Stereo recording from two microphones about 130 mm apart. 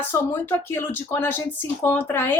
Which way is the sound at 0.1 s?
15° left (ahead or behind).